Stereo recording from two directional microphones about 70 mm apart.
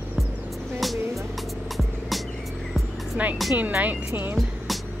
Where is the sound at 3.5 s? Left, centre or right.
Right.